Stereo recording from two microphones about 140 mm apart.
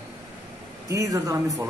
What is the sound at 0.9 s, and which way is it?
Speech, 20° right (ahead or behind).